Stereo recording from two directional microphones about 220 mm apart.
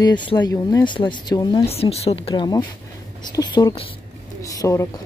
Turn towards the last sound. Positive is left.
turn(degrees=15)  # may be behind; listen again after turning